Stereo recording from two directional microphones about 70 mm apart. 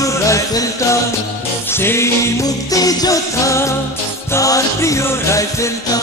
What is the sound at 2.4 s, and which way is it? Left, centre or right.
Music, left.